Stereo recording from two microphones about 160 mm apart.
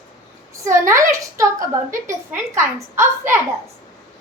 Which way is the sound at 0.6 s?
20° right (ahead or behind).